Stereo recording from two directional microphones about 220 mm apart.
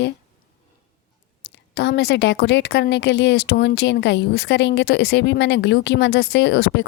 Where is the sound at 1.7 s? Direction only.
50° left (ahead or behind).